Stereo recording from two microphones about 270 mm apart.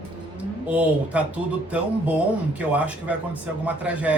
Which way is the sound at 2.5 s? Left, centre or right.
Centre.